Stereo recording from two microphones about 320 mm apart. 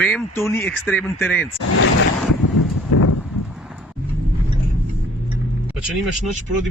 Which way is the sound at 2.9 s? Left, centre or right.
Left.